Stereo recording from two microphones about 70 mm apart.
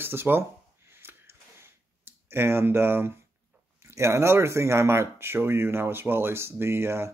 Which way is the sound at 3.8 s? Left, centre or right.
Right.